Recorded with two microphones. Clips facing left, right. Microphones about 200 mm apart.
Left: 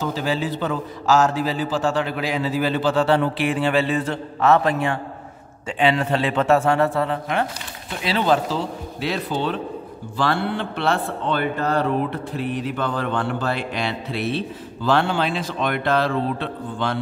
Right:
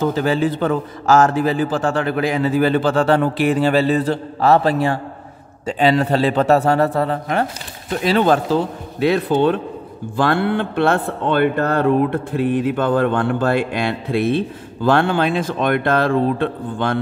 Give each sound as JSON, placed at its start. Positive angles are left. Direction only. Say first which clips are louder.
{"t": 0.0, "sound": "a man's voice", "louder": "right 6 dB", "side_deg": -55}